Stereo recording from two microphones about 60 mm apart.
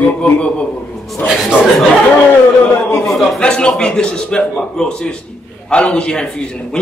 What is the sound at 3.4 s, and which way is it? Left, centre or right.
A man's voice, centre.